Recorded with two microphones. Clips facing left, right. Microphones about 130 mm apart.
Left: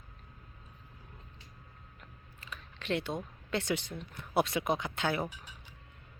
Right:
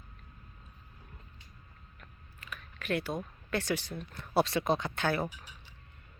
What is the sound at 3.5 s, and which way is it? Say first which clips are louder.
Speech: even; 20° left (ahead or behind).